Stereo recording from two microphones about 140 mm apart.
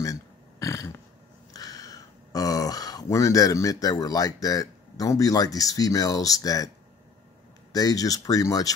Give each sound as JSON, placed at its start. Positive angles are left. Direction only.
{"t": 0.0, "sound": "burping", "side_deg": 20}
{"t": 1.5, "sound": "speech", "side_deg": 25}
{"t": 7.7, "sound": "speech", "side_deg": 25}